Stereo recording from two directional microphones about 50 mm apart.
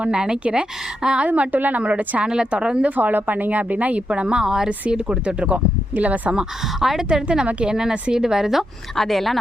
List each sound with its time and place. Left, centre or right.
0.0 s a woman's voice: centre
1.3 s a woman's voice: right
2.2 s speech: centre
2.9 s speech: right
6.3 s a woman's voice: centre
7.1 s a woman's voice: centre
9.0 s speech: centre